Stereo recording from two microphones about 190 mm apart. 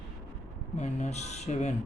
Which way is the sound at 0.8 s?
35° left (ahead or behind).